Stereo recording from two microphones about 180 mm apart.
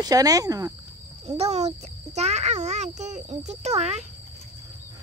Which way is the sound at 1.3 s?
35° right (ahead or behind).